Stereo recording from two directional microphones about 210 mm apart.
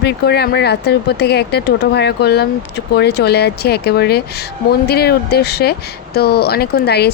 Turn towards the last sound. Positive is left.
turn(degrees=50)  # may be behind; listen again after turning